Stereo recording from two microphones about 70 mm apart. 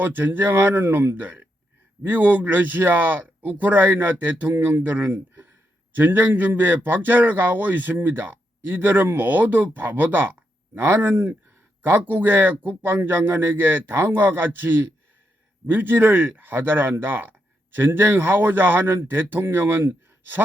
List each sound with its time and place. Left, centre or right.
0.0 s a man's voice: right